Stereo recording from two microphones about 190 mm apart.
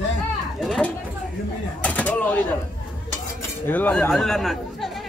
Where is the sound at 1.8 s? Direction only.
10° left (ahead or behind).